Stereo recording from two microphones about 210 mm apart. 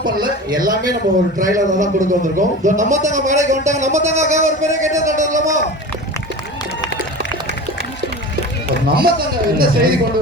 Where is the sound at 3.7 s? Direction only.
35° right (ahead or behind).